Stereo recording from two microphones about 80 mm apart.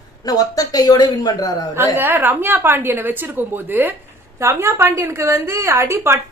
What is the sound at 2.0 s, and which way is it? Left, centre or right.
A woman's voice, right.